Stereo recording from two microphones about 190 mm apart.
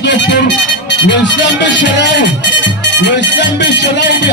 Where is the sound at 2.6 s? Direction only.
70° left (ahead or behind).